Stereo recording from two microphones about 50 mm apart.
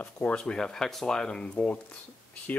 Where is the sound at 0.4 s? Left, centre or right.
Centre.